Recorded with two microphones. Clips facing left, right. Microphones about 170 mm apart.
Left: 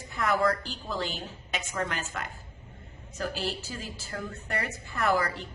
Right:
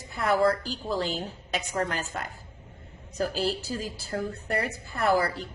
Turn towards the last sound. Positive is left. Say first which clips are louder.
# right 3 dB
turn(degrees=-30)  # may be behind; listen again after turning